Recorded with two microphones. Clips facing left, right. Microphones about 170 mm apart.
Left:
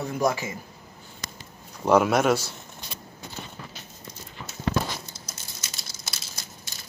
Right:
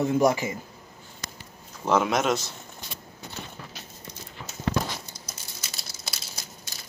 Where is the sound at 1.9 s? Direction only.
10° left (ahead or behind).